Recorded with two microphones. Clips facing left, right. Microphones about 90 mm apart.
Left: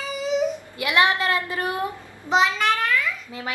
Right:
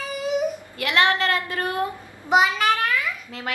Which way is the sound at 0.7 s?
15° left (ahead or behind).